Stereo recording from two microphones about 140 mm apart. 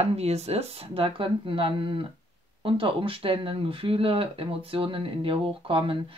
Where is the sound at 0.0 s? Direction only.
50° right (ahead or behind).